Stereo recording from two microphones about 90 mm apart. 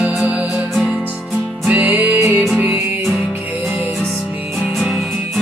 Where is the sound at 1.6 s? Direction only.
20° right (ahead or behind).